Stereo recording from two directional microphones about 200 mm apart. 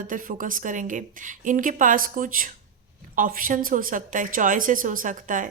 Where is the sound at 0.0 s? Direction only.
40° right (ahead or behind).